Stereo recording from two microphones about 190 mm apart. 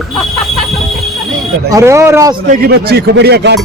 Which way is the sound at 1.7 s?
15° right (ahead or behind).